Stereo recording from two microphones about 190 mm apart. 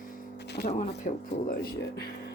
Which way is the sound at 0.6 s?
40° left (ahead or behind).